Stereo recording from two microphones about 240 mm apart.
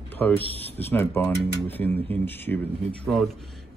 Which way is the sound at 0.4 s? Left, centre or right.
Right.